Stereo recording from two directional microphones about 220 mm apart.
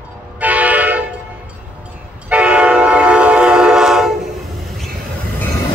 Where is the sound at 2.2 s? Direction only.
5° right (ahead or behind).